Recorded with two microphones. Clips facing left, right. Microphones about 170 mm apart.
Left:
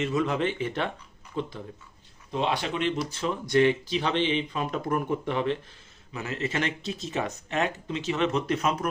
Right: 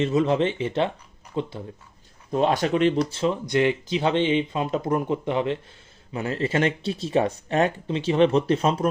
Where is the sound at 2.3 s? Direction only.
45° right (ahead or behind); by 3.3 s 30° right (ahead or behind).